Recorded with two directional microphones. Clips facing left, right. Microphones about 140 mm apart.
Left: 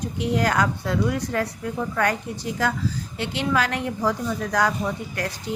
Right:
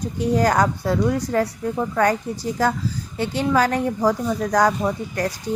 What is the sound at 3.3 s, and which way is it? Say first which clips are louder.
A woman's voice: right 5 dB; 40° right (ahead or behind).